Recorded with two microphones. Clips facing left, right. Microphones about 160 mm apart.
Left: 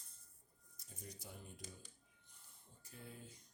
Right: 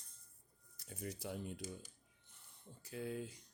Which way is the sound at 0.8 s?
70° right (ahead or behind).